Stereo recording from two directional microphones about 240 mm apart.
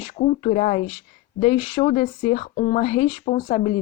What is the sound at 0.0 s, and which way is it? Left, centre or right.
Speech, left.